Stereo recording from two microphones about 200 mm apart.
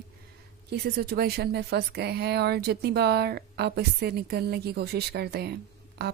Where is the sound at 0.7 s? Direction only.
55° right (ahead or behind).